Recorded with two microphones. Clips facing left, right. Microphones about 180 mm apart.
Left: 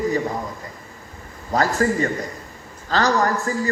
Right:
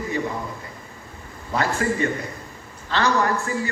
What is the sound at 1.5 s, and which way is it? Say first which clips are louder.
A man's voice: left 4 dB; 40° left (ahead or behind).